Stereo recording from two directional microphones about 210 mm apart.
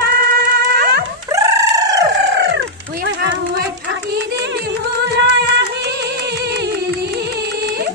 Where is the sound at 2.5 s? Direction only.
55° right (ahead or behind).